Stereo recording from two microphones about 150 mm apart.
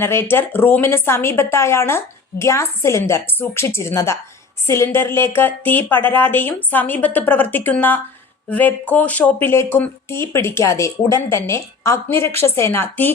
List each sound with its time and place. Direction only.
0.0 s speech: 15° left (ahead or behind)